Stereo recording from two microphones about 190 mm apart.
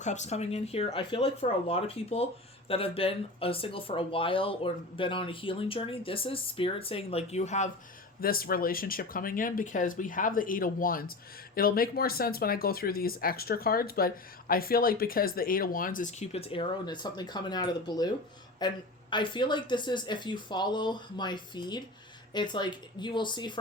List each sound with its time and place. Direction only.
0.0 s speech: 40° left (ahead or behind)
8.2 s speech: 50° left (ahead or behind); by 23.6 s 25° left (ahead or behind)